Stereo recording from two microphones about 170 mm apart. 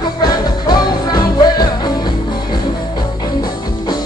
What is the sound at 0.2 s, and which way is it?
Music, 25° left (ahead or behind).